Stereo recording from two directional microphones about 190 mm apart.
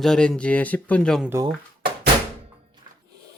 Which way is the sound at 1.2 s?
15° right (ahead or behind).